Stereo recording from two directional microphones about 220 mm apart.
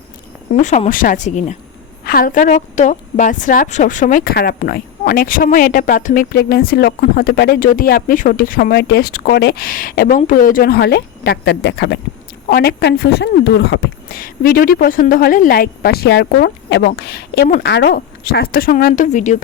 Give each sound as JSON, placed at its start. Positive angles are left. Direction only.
{"t": 0.5, "sound": "a woman's voice", "side_deg": 35}